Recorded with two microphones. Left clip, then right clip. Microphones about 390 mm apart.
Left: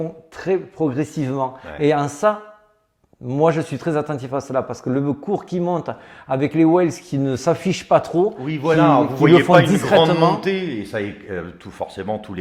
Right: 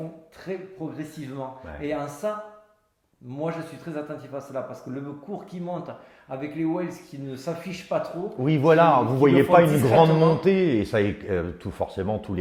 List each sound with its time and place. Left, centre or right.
0.3 s speech: left
8.4 s a man's voice: right